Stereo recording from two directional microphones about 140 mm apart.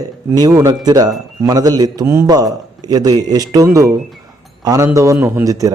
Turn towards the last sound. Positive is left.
turn(degrees=-25)  # may be behind; listen again after turning